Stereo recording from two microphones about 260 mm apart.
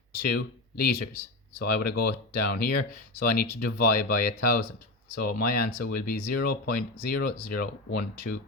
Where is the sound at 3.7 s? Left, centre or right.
Left.